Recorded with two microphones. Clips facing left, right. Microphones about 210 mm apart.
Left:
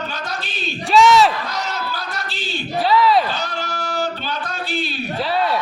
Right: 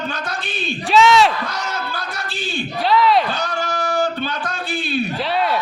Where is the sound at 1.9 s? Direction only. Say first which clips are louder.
Even; 50° right (ahead or behind).